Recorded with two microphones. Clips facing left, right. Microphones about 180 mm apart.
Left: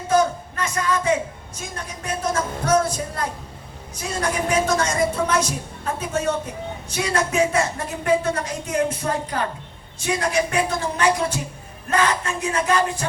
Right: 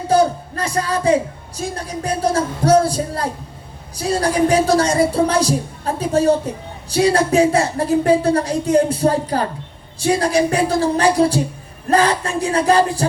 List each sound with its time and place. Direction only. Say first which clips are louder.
0.1 s a woman's voice: right 4 dB; 35° right (ahead or behind)